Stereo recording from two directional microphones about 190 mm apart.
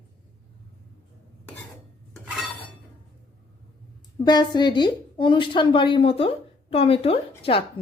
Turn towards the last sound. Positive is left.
turn(degrees=30)  # may be behind; listen again after turning